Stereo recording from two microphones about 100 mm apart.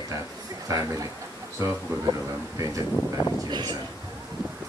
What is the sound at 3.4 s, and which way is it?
Speech, 45° right (ahead or behind).